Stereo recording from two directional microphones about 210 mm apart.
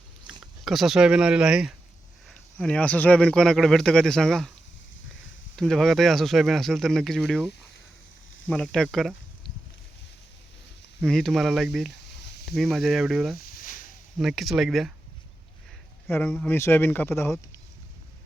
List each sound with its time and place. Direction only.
0.6 s speech: centre (ahead or behind)
5.5 s speech: centre (ahead or behind)
11.0 s speech: centre (ahead or behind)
13.4 s a sound: 40° left (ahead or behind)
14.2 s speech: centre (ahead or behind)
16.0 s speech: 10° left (ahead or behind)